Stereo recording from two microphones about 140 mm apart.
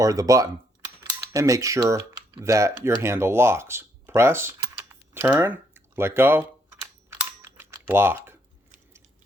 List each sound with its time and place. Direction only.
0.0 s speech: 25° right (ahead or behind)
7.4 s typing: 15° right (ahead or behind)